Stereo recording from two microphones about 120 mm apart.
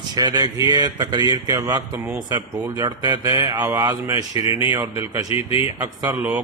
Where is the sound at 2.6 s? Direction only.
30° right (ahead or behind).